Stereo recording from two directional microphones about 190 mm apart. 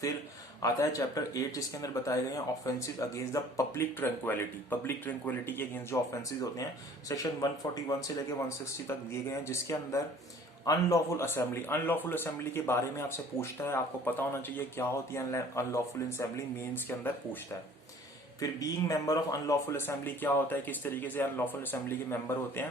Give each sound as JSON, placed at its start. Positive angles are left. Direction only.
{"t": 0.6, "sound": "speech", "side_deg": 20}
{"t": 7.1, "sound": "speech", "side_deg": 20}
{"t": 18.3, "sound": "speech", "side_deg": 20}